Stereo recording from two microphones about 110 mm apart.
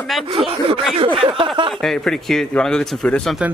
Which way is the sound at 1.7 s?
5° left (ahead or behind).